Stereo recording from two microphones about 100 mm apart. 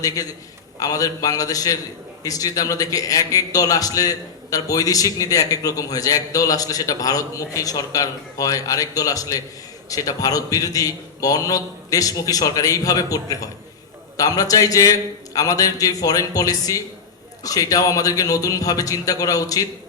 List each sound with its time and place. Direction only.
0.0 s a man's voice: 35° left (ahead or behind)